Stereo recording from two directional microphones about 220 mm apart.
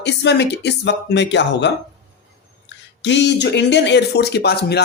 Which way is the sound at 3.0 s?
50° left (ahead or behind).